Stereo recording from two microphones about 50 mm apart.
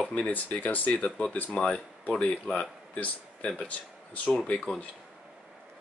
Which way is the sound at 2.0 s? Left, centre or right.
Left.